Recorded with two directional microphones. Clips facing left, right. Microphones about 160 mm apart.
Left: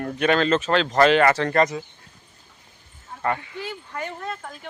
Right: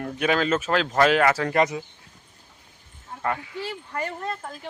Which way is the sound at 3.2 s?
Centre (ahead or behind).